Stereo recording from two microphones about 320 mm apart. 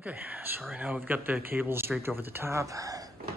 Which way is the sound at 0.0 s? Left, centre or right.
Centre.